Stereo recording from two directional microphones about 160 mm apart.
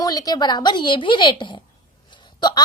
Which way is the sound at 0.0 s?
25° left (ahead or behind).